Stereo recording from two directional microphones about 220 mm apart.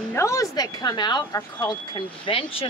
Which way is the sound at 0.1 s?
15° left (ahead or behind).